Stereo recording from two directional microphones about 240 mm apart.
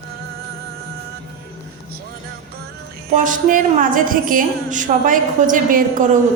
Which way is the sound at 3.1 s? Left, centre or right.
Right.